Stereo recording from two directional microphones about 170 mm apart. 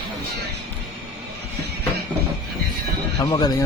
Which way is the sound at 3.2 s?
20° left (ahead or behind).